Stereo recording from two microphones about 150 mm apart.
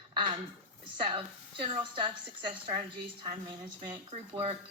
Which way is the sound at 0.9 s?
30° right (ahead or behind).